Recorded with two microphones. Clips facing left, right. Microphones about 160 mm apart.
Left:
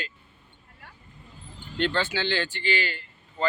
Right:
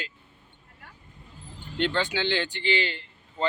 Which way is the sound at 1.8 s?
15° right (ahead or behind).